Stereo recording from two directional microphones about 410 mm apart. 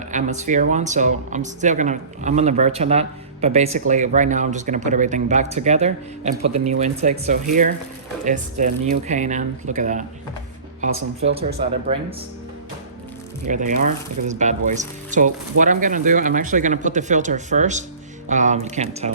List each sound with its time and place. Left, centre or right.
0.1 s speech: centre
11.2 s speech: centre
13.4 s speech: centre